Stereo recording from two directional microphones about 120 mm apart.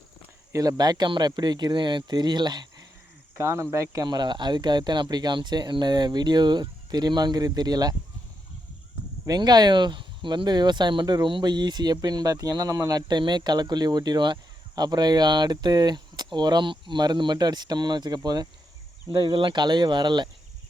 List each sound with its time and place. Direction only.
0.5 s speech: 30° right (ahead or behind)
3.3 s speech: 20° right (ahead or behind)
9.2 s speech: 35° right (ahead or behind)